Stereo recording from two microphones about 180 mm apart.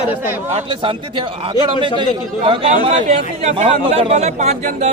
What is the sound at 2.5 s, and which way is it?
Speech, 40° right (ahead or behind).